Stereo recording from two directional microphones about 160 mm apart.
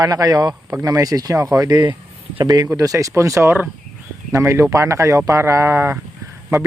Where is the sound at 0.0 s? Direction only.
25° right (ahead or behind).